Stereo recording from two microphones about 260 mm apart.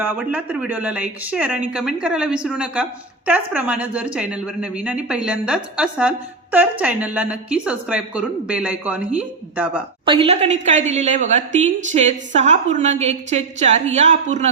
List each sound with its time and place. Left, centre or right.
0.0 s a woman's voice: centre
10.1 s a woman's voice: right